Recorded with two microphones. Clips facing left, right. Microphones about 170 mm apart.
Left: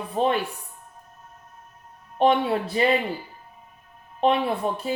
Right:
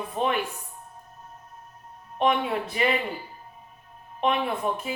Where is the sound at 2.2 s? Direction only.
35° left (ahead or behind).